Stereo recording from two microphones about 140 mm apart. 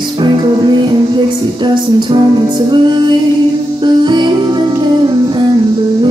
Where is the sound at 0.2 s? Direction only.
35° right (ahead or behind).